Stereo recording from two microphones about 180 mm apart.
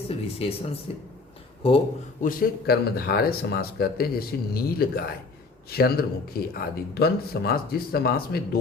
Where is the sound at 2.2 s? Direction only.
55° left (ahead or behind).